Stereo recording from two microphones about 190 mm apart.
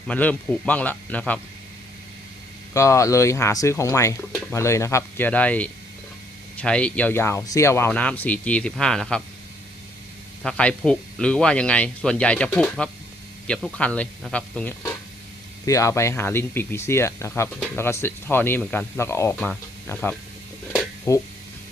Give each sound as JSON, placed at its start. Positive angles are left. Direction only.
{"t": 0.1, "sound": "speech", "side_deg": 5}
{"t": 2.7, "sound": "speech", "side_deg": 15}
{"t": 10.4, "sound": "speech", "side_deg": 5}
{"t": 13.7, "sound": "speech", "side_deg": 5}